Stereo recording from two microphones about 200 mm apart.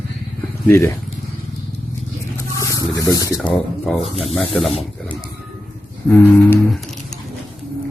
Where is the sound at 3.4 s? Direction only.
Centre (ahead or behind).